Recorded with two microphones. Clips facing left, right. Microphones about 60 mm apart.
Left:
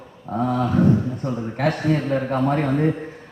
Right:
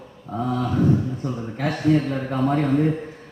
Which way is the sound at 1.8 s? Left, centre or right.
Left.